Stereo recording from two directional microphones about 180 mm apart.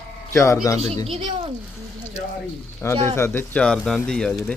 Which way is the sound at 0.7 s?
35° right (ahead or behind).